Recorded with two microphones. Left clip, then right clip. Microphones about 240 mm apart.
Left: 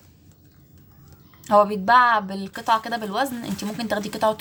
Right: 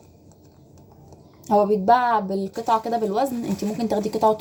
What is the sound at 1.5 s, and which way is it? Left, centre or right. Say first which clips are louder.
A woman's voice: left 1 dB; left.